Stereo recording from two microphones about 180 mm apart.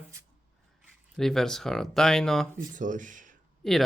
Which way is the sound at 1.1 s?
Centre (ahead or behind).